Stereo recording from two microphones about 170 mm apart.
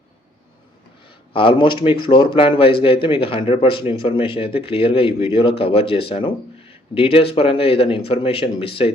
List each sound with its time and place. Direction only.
1.3 s speech: 30° left (ahead or behind)